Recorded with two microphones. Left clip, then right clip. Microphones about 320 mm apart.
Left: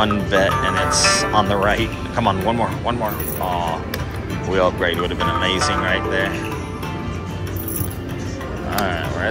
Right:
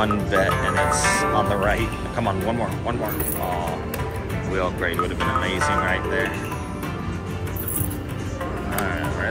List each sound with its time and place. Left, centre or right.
0.0 s speech: centre
4.6 s speech: centre
8.7 s speech: centre